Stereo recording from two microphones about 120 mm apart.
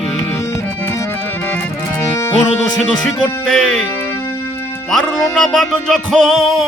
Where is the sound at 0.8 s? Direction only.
20° left (ahead or behind).